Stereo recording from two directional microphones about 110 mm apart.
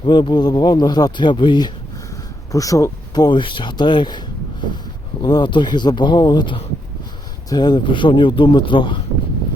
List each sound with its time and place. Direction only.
0.1 s speech: 45° left (ahead or behind)
2.5 s speech: 30° left (ahead or behind)
3.2 s speech: 45° left (ahead or behind)
5.2 s speech: 45° left (ahead or behind)